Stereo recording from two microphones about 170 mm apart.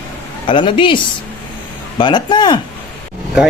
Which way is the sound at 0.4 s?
30° left (ahead or behind).